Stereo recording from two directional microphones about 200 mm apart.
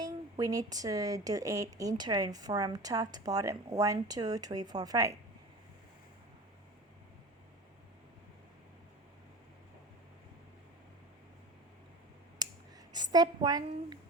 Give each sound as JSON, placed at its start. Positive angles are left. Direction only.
{"t": 0.0, "sound": "speech", "side_deg": -20}
{"t": 12.9, "sound": "a woman's voice", "side_deg": -20}